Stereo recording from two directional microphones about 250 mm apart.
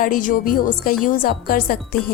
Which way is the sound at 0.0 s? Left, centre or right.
Left.